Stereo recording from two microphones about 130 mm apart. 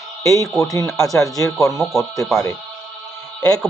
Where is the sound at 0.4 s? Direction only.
Centre (ahead or behind).